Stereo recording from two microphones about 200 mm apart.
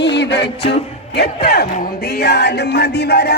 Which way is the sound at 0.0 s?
60° left (ahead or behind).